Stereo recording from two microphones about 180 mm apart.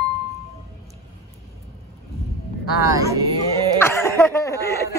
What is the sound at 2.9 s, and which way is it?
Speech, 20° right (ahead or behind).